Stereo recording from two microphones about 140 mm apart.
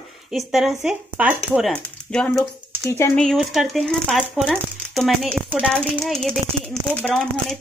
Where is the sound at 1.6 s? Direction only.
5° left (ahead or behind).